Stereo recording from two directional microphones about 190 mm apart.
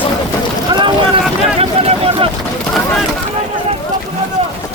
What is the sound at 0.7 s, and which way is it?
Boat, 25° right (ahead or behind).